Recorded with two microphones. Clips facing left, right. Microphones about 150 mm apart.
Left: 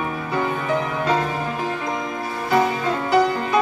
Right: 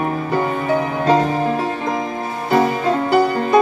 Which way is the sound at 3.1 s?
40° right (ahead or behind).